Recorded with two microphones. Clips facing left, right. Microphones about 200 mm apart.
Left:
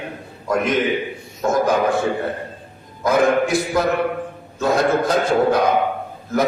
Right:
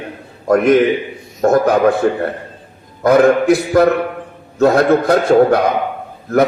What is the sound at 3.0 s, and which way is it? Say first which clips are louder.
A man's voice: right 6 dB; 60° right (ahead or behind).